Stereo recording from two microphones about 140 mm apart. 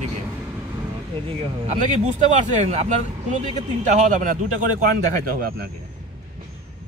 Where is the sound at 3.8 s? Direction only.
70° right (ahead or behind); by 5.7 s 90° right.